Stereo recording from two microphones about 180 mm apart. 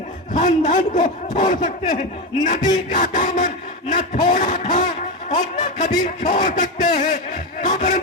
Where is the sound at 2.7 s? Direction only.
45° left (ahead or behind).